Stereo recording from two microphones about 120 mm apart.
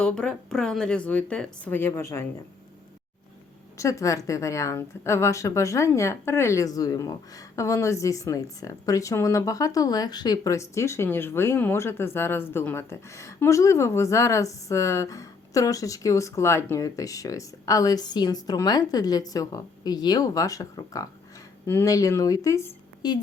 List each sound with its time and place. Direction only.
0.0 s speech: 10° left (ahead or behind)
3.8 s a woman's voice: 25° left (ahead or behind)
23.0 s a woman's voice: 35° left (ahead or behind)